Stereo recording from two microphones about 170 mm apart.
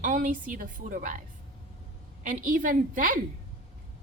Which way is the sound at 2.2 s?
50° right (ahead or behind).